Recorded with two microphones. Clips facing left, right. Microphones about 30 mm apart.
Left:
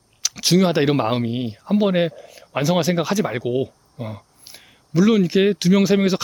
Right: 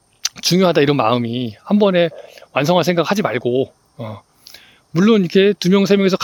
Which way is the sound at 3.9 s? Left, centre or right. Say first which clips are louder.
Right 2 dB; centre.